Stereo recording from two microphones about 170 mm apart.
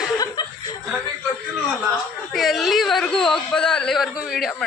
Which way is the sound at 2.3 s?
Centre (ahead or behind).